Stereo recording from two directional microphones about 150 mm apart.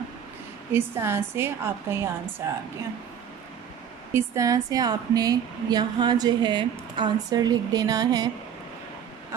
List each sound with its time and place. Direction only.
0.7 s a woman's voice: 15° right (ahead or behind)
4.1 s a woman's voice: 20° right (ahead or behind)